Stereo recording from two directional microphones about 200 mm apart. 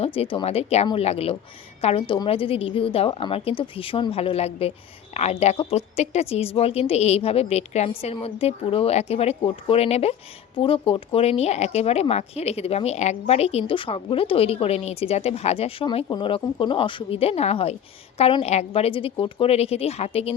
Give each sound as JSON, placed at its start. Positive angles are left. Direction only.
{"t": 0.0, "sound": "a woman's voice", "side_deg": 30}